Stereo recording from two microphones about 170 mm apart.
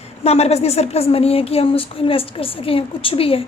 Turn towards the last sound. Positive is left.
turn(degrees=35)  # may be behind; listen again after turning